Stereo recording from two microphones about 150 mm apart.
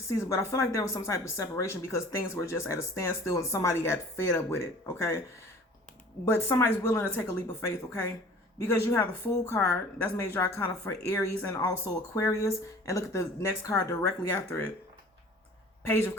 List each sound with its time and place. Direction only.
0.1 s a woman's voice: 20° left (ahead or behind)
6.3 s speech: 15° left (ahead or behind)
8.5 s a woman's voice: 20° left (ahead or behind)
15.9 s speech: 15° left (ahead or behind)